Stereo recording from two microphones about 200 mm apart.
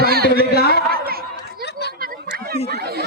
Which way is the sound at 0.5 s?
50° left (ahead or behind).